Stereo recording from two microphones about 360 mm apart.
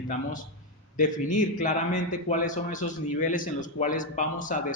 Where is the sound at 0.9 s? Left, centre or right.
Left.